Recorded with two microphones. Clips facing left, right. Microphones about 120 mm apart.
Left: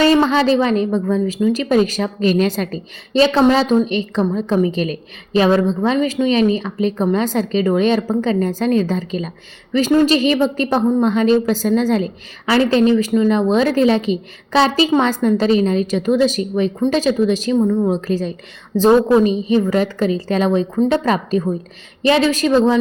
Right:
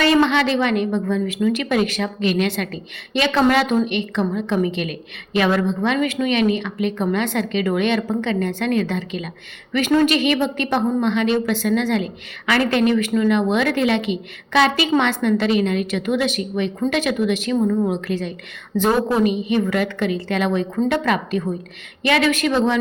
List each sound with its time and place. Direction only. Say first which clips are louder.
0.0 s a woman's voice: left 3 dB; 35° left (ahead or behind)